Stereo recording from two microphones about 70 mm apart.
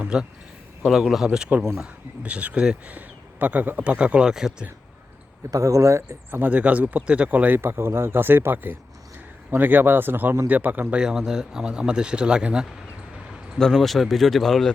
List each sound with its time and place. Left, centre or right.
0.1 s a man's voice: centre
5.5 s speech: right
6.3 s speech: right
7.6 s speech: right
10.9 s a man's voice: centre
13.6 s speech: centre